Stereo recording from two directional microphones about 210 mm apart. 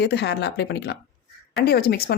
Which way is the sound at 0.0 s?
55° left (ahead or behind).